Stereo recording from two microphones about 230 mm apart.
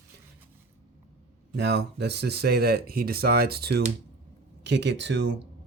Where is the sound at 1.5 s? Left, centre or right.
Right.